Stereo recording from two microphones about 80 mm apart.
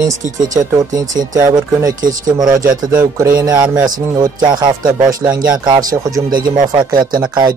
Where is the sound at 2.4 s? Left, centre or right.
Right.